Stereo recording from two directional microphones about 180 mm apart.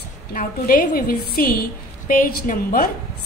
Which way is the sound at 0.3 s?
50° left (ahead or behind).